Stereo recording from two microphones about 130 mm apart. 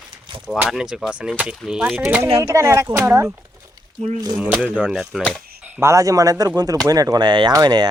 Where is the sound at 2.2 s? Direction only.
25° right (ahead or behind).